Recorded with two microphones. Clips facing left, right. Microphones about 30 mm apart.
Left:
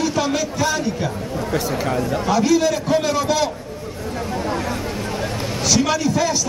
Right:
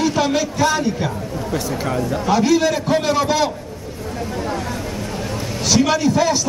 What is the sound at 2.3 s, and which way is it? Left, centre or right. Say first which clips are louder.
A man's voice: right 1 dB; centre.